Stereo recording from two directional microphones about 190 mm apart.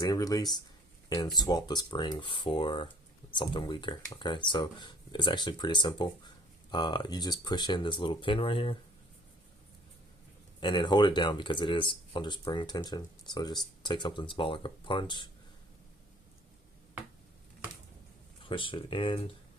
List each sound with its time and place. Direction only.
0.0 s speech: 20° left (ahead or behind)
10.6 s speech: 25° left (ahead or behind)
18.4 s speech: 25° left (ahead or behind)